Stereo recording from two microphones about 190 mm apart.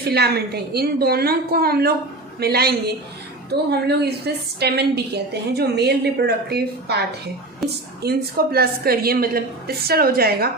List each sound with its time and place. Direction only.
0.0 s a woman's voice: 55° right (ahead or behind)
7.6 s a woman's voice: centre (ahead or behind)
8.0 s a woman's voice: 55° right (ahead or behind)